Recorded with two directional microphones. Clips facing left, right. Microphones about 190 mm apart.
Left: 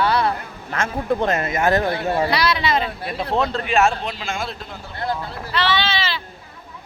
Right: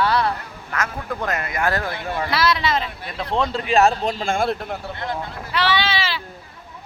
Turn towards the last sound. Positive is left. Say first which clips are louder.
# even
turn(degrees=-10)  # may be behind; listen again after turning